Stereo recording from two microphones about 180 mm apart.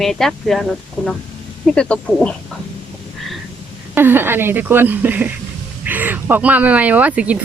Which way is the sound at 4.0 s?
10° right (ahead or behind).